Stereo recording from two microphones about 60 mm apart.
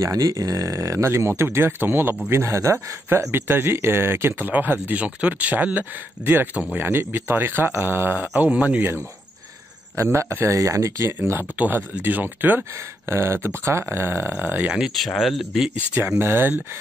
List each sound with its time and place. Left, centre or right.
0.0 s speech: right
2.2 s speech: right
3.3 s speech: right
4.3 s speech: right
6.8 s speech: right
9.9 s speech: right
10.5 s speech: right
11.5 s speech: right
13.1 s speech: right
15.0 s speech: centre
16.0 s speech: right